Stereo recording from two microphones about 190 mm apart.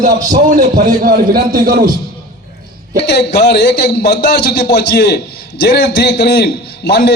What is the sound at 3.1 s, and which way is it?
A man's voice, 60° left (ahead or behind).